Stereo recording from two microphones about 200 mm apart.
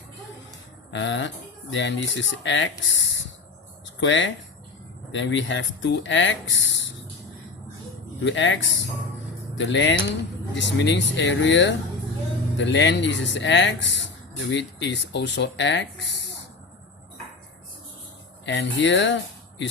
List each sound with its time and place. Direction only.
0.9 s a sound: 65° left (ahead or behind)
1.7 s speech: 65° left (ahead or behind)
4.0 s speech: 70° left (ahead or behind)
8.2 s speech: 65° left (ahead or behind)
9.6 s speech: 65° left (ahead or behind)
18.4 s speech: 65° left (ahead or behind)